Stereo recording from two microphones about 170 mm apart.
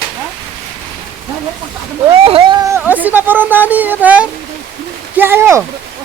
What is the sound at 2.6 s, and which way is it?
Speech, 10° right (ahead or behind).